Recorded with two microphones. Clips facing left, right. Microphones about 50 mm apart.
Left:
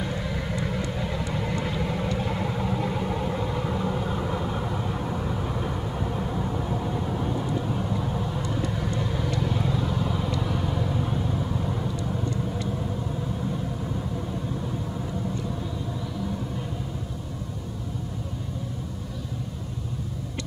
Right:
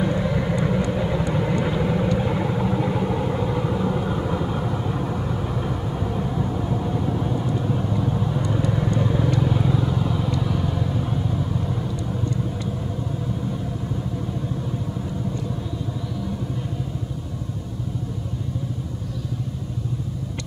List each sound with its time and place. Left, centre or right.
0.0 s vehicle: centre